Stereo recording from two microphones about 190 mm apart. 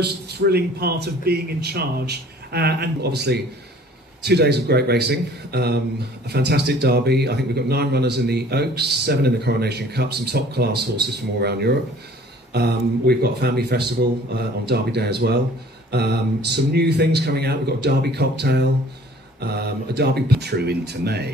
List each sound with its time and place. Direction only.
0.0 s a man's voice: 60° right (ahead or behind)